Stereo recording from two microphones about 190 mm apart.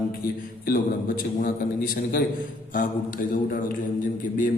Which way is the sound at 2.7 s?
45° left (ahead or behind).